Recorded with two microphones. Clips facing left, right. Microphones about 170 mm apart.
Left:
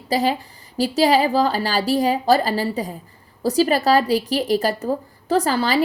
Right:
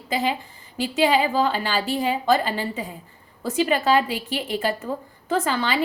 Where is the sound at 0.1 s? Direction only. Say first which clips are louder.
Left 4 dB; 35° left (ahead or behind).